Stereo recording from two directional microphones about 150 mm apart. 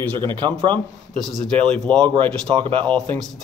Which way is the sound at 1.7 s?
5° left (ahead or behind).